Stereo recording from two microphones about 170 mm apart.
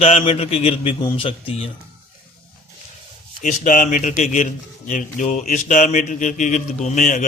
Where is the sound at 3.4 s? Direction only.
50° left (ahead or behind).